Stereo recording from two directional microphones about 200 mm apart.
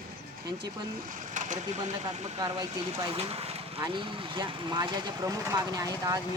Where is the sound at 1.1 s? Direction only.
40° right (ahead or behind).